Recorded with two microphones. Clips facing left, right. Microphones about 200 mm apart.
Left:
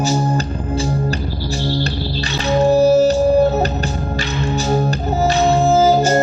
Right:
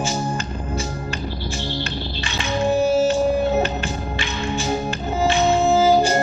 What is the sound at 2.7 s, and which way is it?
Music, 40° left (ahead or behind).